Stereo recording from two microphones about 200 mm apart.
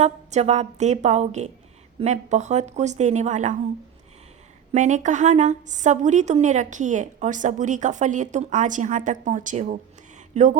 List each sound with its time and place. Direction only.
0.0 s a woman's voice: 35° right (ahead or behind)
4.7 s a woman's voice: 35° right (ahead or behind)